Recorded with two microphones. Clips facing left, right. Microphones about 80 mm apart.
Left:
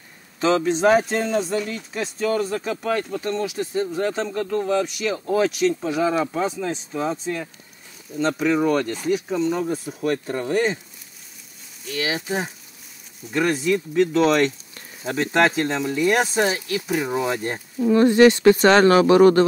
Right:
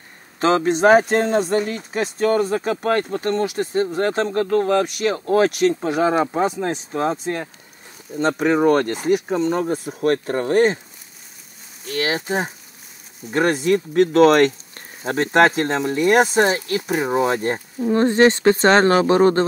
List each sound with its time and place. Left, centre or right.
0.4 s speech: right
11.8 s speech: right
16.9 s speech: right